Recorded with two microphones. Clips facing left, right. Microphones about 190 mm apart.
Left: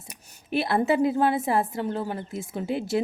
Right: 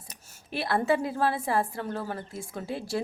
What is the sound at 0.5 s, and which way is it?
A woman's voice, 25° left (ahead or behind).